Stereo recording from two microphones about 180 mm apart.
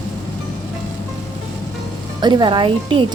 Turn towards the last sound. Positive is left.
turn(degrees=-30)  # may be behind; listen again after turning